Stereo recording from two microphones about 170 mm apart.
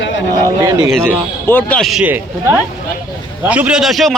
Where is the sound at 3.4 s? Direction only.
10° right (ahead or behind).